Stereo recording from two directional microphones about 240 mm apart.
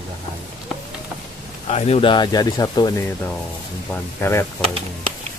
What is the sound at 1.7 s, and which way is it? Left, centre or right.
Speech, left.